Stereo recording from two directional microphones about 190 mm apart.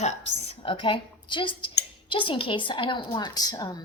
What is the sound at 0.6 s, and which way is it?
A woman's voice, 30° left (ahead or behind).